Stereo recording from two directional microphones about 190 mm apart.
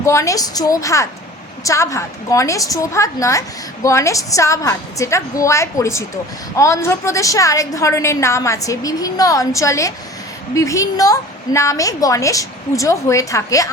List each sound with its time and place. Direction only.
0.0 s a woman's voice: 15° left (ahead or behind)